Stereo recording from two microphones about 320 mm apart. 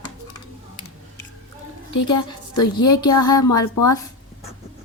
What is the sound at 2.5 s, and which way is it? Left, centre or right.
Speech, centre.